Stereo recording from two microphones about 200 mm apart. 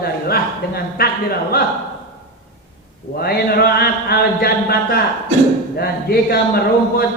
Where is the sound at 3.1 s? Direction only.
50° left (ahead or behind).